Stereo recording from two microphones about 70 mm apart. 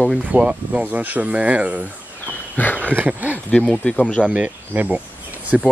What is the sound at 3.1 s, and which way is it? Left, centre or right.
Speech, right.